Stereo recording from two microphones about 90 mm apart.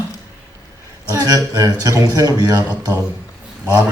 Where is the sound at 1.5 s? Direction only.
40° right (ahead or behind).